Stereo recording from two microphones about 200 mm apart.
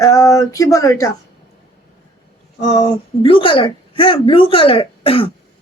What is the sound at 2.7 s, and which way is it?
A woman's voice, 25° left (ahead or behind).